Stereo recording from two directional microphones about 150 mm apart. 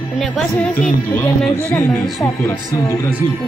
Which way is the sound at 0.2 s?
5° left (ahead or behind).